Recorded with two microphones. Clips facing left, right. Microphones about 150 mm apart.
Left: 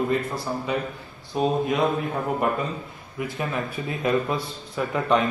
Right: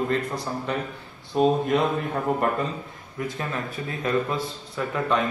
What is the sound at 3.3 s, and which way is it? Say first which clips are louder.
A man's voice: left 2 dB; 15° left (ahead or behind).